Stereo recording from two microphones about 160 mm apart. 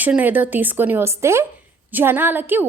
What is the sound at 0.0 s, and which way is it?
A woman's voice, 10° right (ahead or behind).